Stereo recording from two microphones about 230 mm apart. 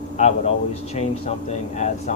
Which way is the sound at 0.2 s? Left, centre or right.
Left.